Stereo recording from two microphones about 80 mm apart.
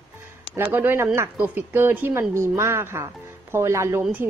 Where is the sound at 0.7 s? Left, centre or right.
Right.